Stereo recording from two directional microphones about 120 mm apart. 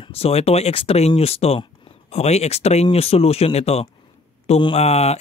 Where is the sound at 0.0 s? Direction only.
55° left (ahead or behind).